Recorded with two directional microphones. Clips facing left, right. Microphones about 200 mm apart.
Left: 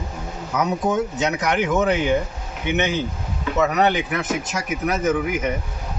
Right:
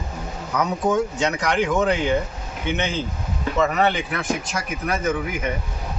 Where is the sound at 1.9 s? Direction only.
20° left (ahead or behind).